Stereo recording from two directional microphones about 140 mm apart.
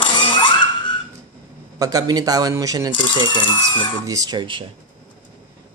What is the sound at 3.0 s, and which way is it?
Speech, 35° left (ahead or behind).